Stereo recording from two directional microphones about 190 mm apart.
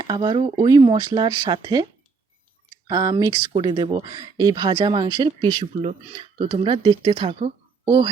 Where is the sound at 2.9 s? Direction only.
20° right (ahead or behind).